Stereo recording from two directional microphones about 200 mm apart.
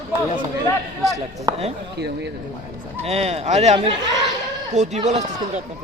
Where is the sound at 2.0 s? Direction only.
55° right (ahead or behind).